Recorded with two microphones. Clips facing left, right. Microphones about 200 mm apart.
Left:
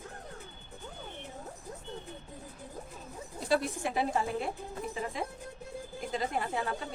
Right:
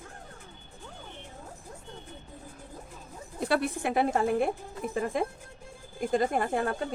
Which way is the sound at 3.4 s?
60° right (ahead or behind).